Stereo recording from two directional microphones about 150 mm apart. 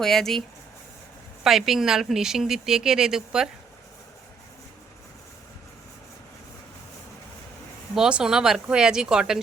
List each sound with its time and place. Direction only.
0.0 s speech: centre (ahead or behind)
1.5 s speech: centre (ahead or behind)
7.9 s speech: 5° right (ahead or behind)